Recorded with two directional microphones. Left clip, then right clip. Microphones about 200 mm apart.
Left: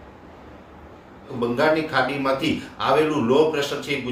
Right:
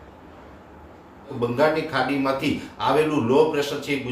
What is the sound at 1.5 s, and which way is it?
A man's voice, 10° left (ahead or behind).